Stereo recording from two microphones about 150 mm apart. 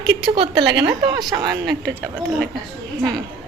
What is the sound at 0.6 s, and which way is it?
Speech, 30° right (ahead or behind).